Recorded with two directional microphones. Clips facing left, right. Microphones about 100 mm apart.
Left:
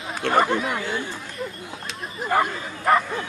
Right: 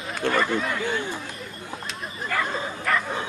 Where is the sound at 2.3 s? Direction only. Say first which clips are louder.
Left 7 dB; 25° left (ahead or behind).